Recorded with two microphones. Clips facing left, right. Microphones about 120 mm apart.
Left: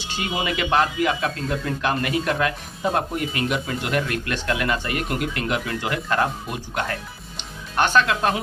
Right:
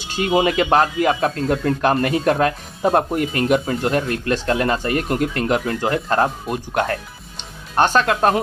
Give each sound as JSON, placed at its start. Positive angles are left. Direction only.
{"t": 0.1, "sound": "speech", "side_deg": -45}
{"t": 7.3, "sound": "music", "side_deg": -35}